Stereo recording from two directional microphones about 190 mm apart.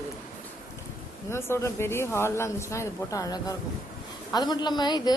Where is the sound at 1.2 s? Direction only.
15° left (ahead or behind).